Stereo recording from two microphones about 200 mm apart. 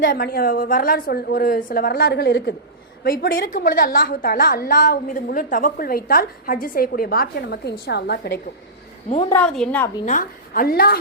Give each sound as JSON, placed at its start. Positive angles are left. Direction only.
{"t": 0.1, "sound": "a woman's voice", "side_deg": 50}
{"t": 9.3, "sound": "a woman's voice", "side_deg": 5}
{"t": 10.1, "sound": "a woman's voice", "side_deg": 45}